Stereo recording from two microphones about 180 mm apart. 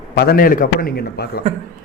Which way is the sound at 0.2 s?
55° left (ahead or behind).